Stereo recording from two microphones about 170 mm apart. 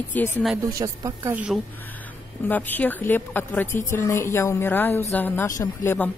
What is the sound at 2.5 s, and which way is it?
A woman's voice, 10° left (ahead or behind).